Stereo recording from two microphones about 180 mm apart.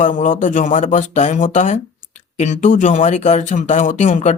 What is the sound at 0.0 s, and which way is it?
Speech, 45° left (ahead or behind).